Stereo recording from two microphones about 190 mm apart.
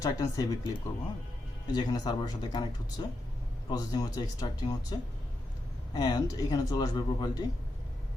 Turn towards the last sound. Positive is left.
turn(degrees=20)  # may be behind; listen again after turning